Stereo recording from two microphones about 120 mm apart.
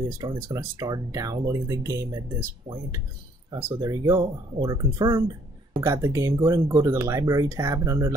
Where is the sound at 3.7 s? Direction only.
30° right (ahead or behind).